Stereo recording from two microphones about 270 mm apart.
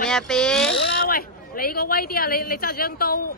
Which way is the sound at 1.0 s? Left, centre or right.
Left.